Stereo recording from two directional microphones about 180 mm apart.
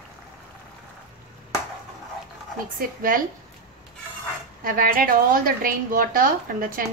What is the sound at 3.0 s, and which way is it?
Speech, 50° right (ahead or behind).